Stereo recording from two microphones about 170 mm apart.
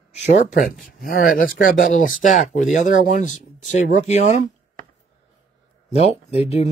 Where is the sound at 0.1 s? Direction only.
45° left (ahead or behind).